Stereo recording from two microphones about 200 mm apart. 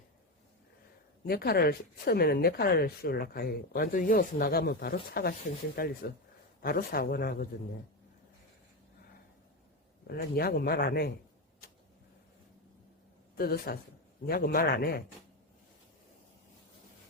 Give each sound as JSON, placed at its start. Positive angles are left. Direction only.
{"t": 1.2, "sound": "speech", "side_deg": 50}
{"t": 10.1, "sound": "speech", "side_deg": 50}
{"t": 13.3, "sound": "speech", "side_deg": 50}